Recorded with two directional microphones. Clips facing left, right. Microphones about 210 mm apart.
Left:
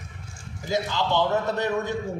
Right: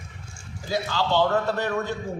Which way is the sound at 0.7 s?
20° left (ahead or behind).